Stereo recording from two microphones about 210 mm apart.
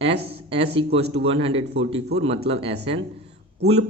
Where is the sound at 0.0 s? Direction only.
25° right (ahead or behind).